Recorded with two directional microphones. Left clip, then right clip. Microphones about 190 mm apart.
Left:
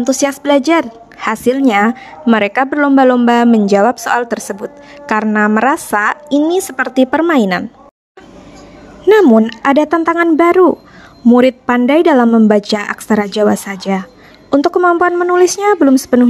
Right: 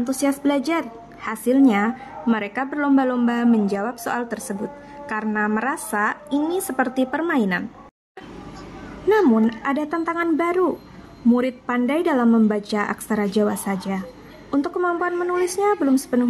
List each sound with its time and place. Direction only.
0.0 s a woman's voice: 40° left (ahead or behind)
9.2 s a woman's voice: 45° left (ahead or behind)